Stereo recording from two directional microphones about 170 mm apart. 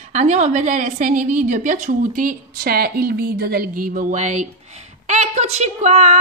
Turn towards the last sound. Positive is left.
turn(degrees=-40)  # may be behind; listen again after turning